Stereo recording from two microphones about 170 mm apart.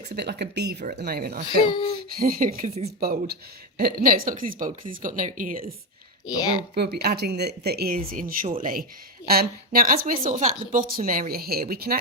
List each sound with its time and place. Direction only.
0.1 s speech: 75° right (ahead or behind)
0.9 s speech: 65° right (ahead or behind)
1.5 s speech: 25° left (ahead or behind)
2.1 s speech: 55° right (ahead or behind)
6.2 s speech: 25° left (ahead or behind)
6.7 s speech: 70° right (ahead or behind)